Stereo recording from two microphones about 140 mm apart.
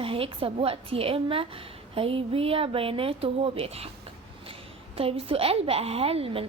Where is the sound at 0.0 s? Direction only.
40° right (ahead or behind).